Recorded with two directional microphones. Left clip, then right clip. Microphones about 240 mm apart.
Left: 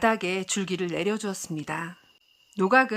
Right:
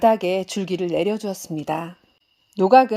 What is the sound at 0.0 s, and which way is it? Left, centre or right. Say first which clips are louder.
Speech: right 7 dB; centre.